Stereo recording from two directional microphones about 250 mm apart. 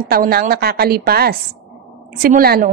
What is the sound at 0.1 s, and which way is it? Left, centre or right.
A woman's voice, right.